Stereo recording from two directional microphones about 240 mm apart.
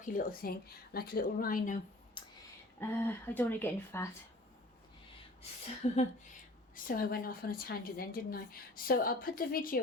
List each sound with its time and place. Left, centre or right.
0.1 s a woman's voice: left
2.2 s a sound: left
2.8 s speech: centre
5.8 s a woman's voice: left